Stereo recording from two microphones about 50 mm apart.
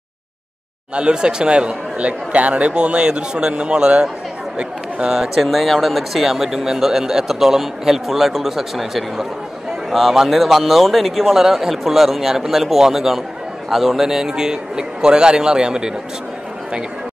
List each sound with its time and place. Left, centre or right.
0.9 s a man's voice: centre